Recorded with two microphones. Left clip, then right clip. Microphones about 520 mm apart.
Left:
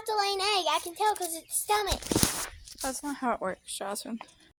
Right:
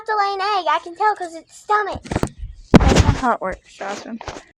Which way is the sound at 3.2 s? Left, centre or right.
Left.